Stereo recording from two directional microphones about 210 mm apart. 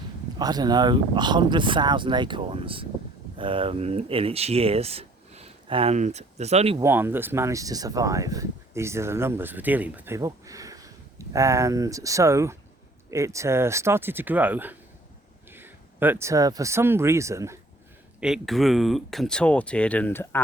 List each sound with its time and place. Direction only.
0.3 s speech: 20° right (ahead or behind)
6.7 s speech: 10° right (ahead or behind)
18.2 s speech: centre (ahead or behind)